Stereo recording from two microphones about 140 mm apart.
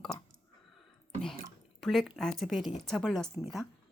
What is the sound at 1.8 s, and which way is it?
Speech, centre (ahead or behind).